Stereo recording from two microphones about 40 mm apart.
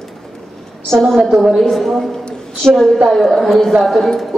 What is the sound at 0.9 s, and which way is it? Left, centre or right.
A woman's voice, centre.